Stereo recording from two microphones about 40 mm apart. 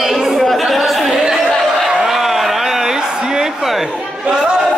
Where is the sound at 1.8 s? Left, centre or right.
Centre.